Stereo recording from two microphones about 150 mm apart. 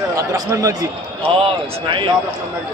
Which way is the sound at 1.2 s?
35° right (ahead or behind).